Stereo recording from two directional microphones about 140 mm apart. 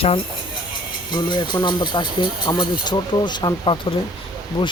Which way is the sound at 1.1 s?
35° left (ahead or behind).